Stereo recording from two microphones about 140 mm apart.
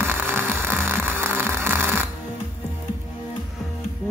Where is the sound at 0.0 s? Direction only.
15° right (ahead or behind).